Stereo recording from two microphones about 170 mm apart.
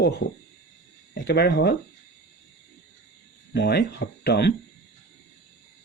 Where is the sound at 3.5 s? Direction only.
75° left (ahead or behind).